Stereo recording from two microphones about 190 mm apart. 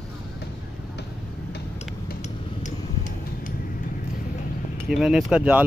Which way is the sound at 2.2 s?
40° left (ahead or behind).